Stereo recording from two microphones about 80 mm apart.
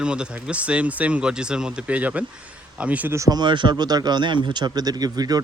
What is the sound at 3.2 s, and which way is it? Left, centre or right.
Speech, right.